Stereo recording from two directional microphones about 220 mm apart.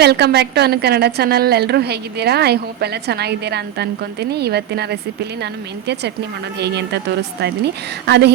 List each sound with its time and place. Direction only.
0.0 s a woman's voice: 50° right (ahead or behind)
6.6 s a woman's voice: 50° right (ahead or behind)